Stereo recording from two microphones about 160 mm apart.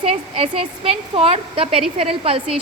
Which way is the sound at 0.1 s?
35° right (ahead or behind).